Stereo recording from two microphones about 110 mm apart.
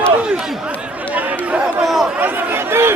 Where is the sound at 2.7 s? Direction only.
20° right (ahead or behind).